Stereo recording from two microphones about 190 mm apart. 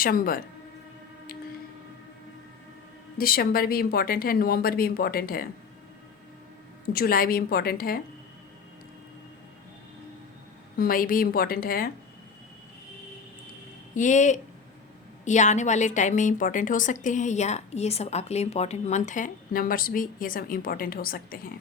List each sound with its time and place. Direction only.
0.0 s speech: 50° left (ahead or behind)
3.2 s speech: 50° left (ahead or behind)
6.9 s speech: 50° left (ahead or behind)
10.8 s speech: 50° left (ahead or behind)
13.9 s a woman's voice: 40° left (ahead or behind)